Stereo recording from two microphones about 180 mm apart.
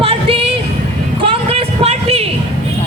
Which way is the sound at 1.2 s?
30° right (ahead or behind).